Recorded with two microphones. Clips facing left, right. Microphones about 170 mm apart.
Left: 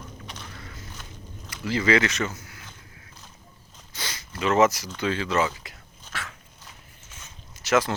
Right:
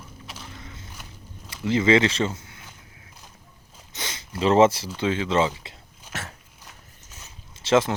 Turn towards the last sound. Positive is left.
turn(degrees=-25)  # may be behind; listen again after turning